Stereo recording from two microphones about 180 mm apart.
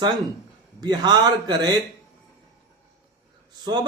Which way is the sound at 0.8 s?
20° right (ahead or behind).